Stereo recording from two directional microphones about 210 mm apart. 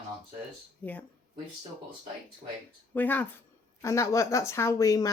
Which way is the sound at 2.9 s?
10° left (ahead or behind).